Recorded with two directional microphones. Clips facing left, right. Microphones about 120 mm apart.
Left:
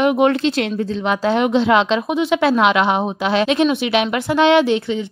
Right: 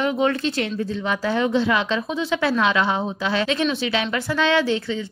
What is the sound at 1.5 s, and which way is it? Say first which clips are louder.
Speech: left 7 dB; 90° left.